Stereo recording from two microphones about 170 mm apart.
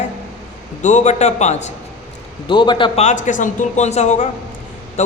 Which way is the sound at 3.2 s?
50° left (ahead or behind).